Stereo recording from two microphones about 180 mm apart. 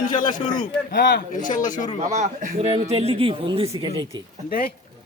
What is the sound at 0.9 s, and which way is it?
Speech, 70° left (ahead or behind).